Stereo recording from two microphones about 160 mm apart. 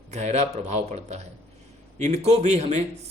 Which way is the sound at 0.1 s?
45° right (ahead or behind).